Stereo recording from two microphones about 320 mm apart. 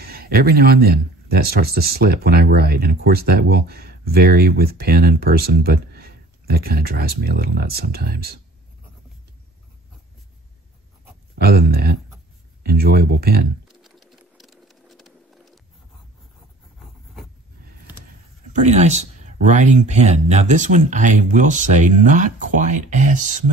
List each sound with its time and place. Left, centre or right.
0.0 s speech: right
11.3 s speech: right
13.7 s sewing machine: centre
16.8 s a sound: centre
18.5 s speech: right